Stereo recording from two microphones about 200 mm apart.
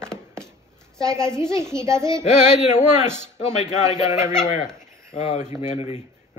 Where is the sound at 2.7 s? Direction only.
35° left (ahead or behind).